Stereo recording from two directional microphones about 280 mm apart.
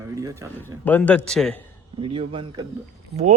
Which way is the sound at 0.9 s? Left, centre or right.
Centre.